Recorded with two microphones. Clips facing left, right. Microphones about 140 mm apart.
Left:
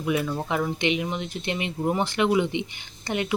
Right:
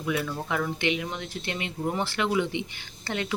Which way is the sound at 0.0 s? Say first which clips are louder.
Left 3 dB; 20° left (ahead or behind).